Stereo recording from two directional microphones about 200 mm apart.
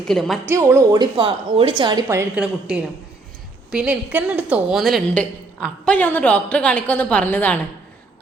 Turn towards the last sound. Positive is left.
turn(degrees=10)  # may be behind; listen again after turning